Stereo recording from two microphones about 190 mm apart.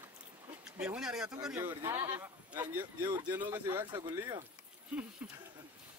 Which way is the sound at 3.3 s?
10° right (ahead or behind).